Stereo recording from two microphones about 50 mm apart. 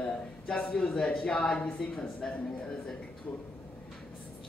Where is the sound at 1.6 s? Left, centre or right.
Left.